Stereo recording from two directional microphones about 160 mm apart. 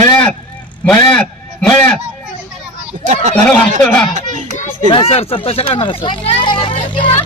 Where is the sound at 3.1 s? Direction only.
45° right (ahead or behind).